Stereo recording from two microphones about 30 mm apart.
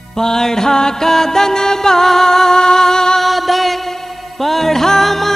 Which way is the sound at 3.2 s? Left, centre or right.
Centre.